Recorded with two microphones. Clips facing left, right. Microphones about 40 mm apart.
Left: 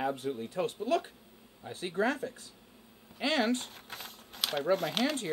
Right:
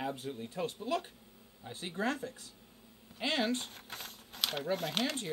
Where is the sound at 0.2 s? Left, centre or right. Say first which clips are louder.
Left 6 dB; left.